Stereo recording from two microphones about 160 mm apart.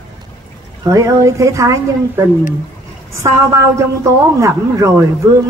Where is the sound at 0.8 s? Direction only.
20° right (ahead or behind).